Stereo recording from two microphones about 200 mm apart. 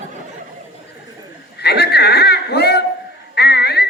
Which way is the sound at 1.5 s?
55° left (ahead or behind).